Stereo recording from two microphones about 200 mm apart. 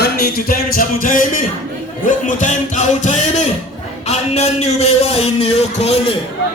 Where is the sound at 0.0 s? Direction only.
50° left (ahead or behind).